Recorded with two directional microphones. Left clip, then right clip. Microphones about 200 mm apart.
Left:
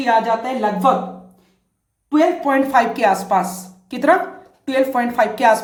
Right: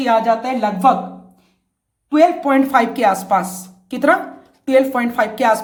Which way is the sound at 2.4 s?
40° right (ahead or behind).